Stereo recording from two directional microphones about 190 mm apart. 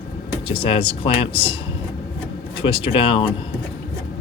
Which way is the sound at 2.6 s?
25° left (ahead or behind).